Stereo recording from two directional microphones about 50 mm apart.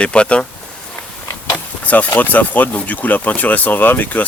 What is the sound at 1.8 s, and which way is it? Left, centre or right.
Speech, left.